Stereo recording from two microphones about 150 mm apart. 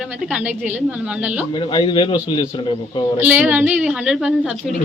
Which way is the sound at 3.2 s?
10° right (ahead or behind).